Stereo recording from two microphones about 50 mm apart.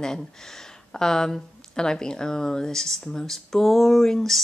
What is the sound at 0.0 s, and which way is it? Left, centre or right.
Speech, centre.